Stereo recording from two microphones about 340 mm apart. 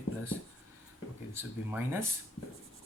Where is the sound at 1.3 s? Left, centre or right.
Centre.